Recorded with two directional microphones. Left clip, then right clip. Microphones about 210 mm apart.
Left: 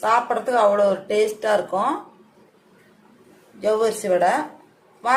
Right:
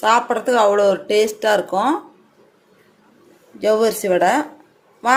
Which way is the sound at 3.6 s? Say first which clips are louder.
Right 4 dB; 40° right (ahead or behind).